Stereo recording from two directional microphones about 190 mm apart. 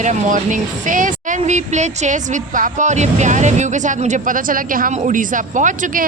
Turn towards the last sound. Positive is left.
turn(degrees=-40)  # may be behind; listen again after turning